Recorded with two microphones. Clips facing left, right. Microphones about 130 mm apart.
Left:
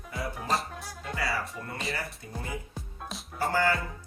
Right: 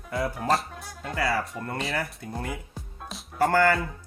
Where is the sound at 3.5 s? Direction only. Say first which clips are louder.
Right 4 dB; 65° right (ahead or behind).